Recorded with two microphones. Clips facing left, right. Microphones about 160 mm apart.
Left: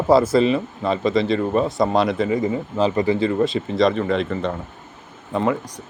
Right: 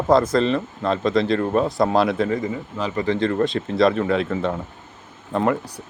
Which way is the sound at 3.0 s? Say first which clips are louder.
Left 1 dB; 5° left (ahead or behind).